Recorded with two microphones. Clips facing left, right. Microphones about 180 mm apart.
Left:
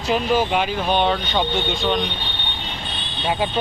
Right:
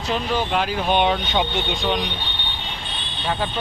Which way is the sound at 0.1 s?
5° left (ahead or behind).